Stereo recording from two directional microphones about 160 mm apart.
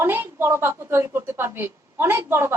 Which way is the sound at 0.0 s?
15° right (ahead or behind).